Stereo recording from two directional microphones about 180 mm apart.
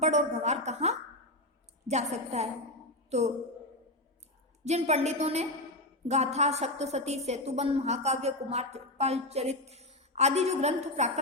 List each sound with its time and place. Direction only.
0.0 s a woman's voice: 40° right (ahead or behind)
4.6 s a woman's voice: 40° right (ahead or behind)